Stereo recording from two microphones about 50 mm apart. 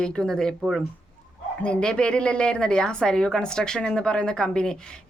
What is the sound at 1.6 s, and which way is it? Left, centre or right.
A woman's voice, centre.